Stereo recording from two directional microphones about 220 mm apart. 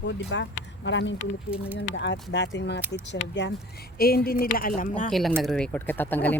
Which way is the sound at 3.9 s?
45° left (ahead or behind).